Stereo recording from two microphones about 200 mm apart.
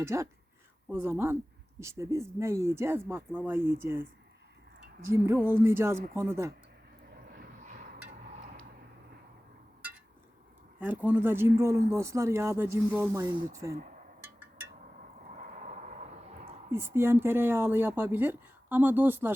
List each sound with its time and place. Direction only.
0.0 s speech: 15° right (ahead or behind)
5.1 s speech: 10° right (ahead or behind)
7.3 s vehicle: 45° right (ahead or behind)
10.8 s speech: 10° right (ahead or behind)
15.4 s a sound: 40° right (ahead or behind)
16.7 s speech: 10° right (ahead or behind)